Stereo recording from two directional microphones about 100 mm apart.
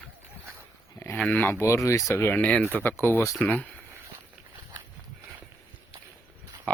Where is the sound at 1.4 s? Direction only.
20° left (ahead or behind).